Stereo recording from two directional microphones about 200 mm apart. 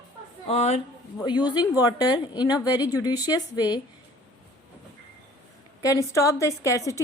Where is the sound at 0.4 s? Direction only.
30° left (ahead or behind).